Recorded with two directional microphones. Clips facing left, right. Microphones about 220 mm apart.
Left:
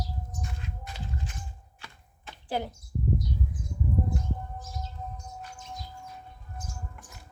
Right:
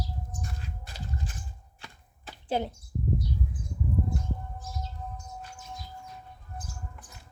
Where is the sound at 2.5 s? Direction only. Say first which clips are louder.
Right 2 dB; 20° right (ahead or behind).